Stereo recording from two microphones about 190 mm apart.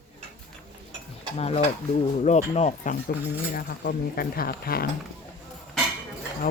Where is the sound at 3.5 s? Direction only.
55° left (ahead or behind).